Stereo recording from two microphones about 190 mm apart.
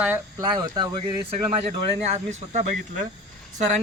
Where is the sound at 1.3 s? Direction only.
35° right (ahead or behind).